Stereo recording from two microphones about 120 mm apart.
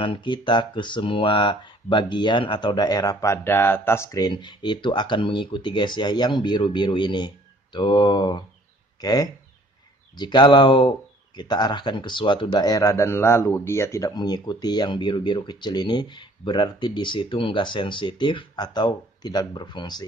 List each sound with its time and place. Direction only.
0.0 s speech: 45° left (ahead or behind); by 14.1 s 25° left (ahead or behind)
14.1 s speech: 35° left (ahead or behind)